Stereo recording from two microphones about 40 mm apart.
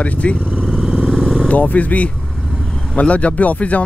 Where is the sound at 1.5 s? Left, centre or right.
Left.